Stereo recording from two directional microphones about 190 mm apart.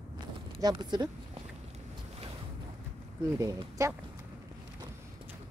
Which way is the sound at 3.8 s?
15° right (ahead or behind).